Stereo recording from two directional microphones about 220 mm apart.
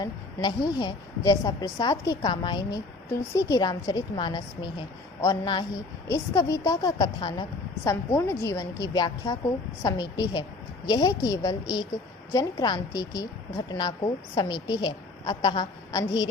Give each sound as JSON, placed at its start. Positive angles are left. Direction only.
{"t": 0.0, "sound": "a woman's voice", "side_deg": 20}